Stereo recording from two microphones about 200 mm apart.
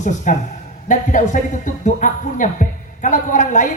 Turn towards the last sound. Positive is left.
turn(degrees=40)  # may be behind; listen again after turning